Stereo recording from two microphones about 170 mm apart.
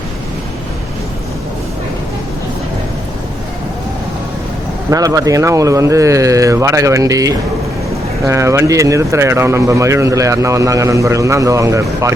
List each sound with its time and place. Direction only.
4.9 s speech: 20° right (ahead or behind)